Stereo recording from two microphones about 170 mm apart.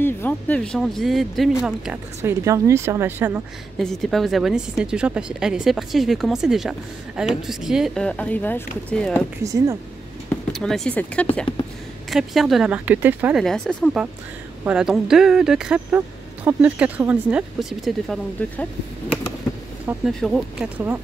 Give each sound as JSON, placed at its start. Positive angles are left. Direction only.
{"t": 0.0, "sound": "a woman's voice", "side_deg": 10}
{"t": 2.4, "sound": "speech", "side_deg": -20}
{"t": 3.7, "sound": "a woman's voice", "side_deg": 0}
{"t": 9.4, "sound": "speech", "side_deg": -20}
{"t": 10.5, "sound": "a woman's voice", "side_deg": 5}
{"t": 13.4, "sound": "a woman's voice", "side_deg": 0}
{"t": 20.1, "sound": "a woman's voice", "side_deg": 0}